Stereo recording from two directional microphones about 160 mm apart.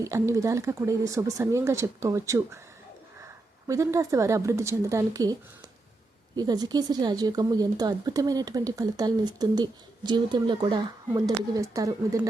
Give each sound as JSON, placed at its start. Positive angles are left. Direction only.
{"t": 0.0, "sound": "a woman's voice", "side_deg": -20}
{"t": 3.7, "sound": "a woman's voice", "side_deg": -20}